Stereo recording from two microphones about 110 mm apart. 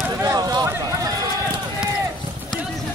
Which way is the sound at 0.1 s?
35° right (ahead or behind).